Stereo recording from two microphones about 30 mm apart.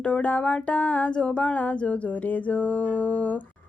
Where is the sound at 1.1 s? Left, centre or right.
Left.